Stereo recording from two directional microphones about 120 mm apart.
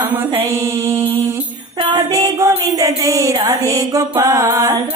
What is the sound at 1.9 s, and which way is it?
Music, 25° right (ahead or behind).